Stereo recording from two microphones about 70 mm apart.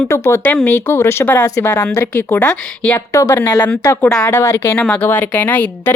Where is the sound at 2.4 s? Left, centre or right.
Centre.